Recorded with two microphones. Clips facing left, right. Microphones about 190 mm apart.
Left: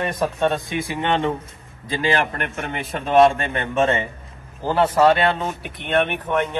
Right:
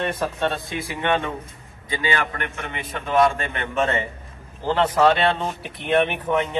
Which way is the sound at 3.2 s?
25° left (ahead or behind).